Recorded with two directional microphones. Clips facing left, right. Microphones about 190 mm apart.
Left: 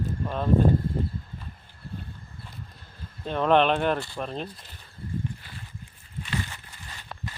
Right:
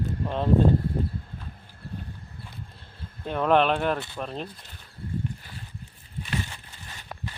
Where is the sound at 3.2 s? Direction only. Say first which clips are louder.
Even; 10° right (ahead or behind).